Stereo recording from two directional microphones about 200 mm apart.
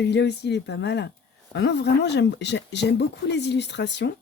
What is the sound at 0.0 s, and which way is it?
Speech, 60° left (ahead or behind).